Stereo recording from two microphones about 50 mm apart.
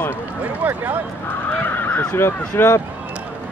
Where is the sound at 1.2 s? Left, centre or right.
Left.